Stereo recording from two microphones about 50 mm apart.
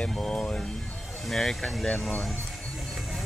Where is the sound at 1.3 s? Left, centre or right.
Centre.